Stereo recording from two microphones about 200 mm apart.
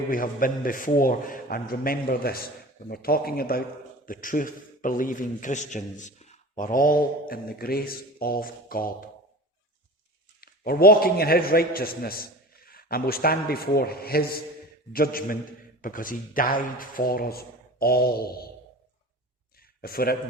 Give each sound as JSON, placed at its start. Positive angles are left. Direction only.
{"t": 0.1, "sound": "a man's voice", "side_deg": 45}
{"t": 10.4, "sound": "a man's voice", "side_deg": 50}
{"t": 19.8, "sound": "a man's voice", "side_deg": 50}